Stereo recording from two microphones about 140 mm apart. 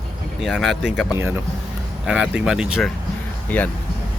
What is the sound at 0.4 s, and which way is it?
Speech, centre (ahead or behind).